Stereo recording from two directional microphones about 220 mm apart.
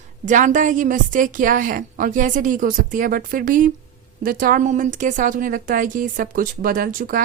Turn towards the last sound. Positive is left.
turn(degrees=-40)  # may be behind; listen again after turning